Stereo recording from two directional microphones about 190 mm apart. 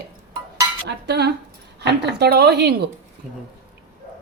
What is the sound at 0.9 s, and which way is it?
Speech, 60° right (ahead or behind).